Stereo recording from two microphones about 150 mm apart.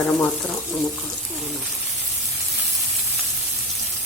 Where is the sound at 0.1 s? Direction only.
15° left (ahead or behind).